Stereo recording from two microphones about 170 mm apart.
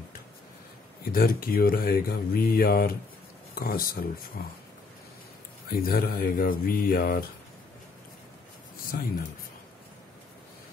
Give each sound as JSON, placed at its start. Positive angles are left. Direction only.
{"t": 1.1, "sound": "speech", "side_deg": 60}
{"t": 5.7, "sound": "speech", "side_deg": 60}
{"t": 8.9, "sound": "speech", "side_deg": 60}